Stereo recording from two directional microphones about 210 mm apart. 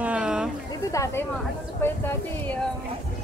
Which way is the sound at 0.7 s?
15° left (ahead or behind).